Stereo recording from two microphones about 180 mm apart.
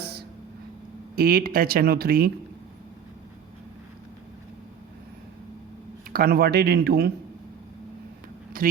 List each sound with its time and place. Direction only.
1.1 s speech: 55° right (ahead or behind)
6.1 s speech: 55° right (ahead or behind)
8.6 s speech: 50° right (ahead or behind)